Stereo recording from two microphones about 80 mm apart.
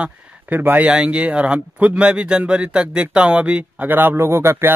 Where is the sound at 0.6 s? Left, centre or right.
Right.